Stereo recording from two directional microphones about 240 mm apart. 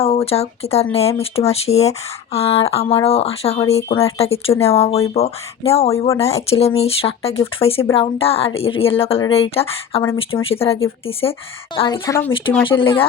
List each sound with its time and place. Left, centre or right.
0.0 s speech: left